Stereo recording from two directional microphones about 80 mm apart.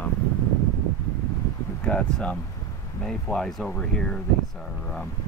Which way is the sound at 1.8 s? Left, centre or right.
Centre.